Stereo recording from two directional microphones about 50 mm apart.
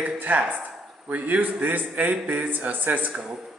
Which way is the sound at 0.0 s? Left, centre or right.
Right.